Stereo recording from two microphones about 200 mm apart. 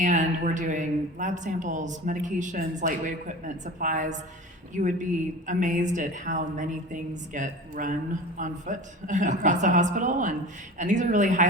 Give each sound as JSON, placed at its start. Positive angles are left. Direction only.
{"t": 0.0, "sound": "a woman's voice", "side_deg": -40}